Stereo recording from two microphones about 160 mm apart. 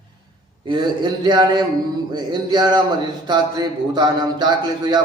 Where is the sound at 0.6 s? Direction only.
30° right (ahead or behind).